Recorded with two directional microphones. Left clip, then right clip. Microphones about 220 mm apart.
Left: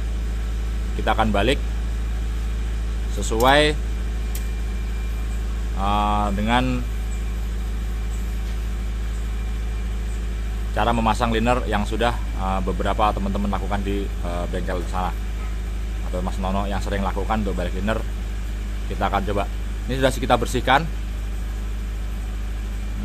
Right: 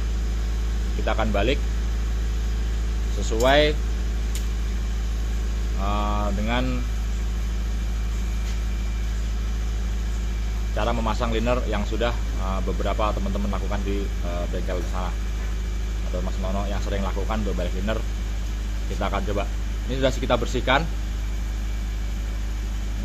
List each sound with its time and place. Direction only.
1.0 s speech: 20° left (ahead or behind)
3.3 s speech: 20° left (ahead or behind)
5.8 s speech: 20° left (ahead or behind)
10.8 s speech: 20° left (ahead or behind)
16.3 s speech: 25° left (ahead or behind)